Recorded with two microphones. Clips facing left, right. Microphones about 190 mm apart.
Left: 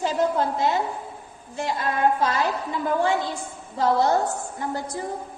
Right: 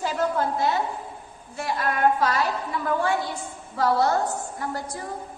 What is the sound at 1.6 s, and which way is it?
Speech, 20° left (ahead or behind).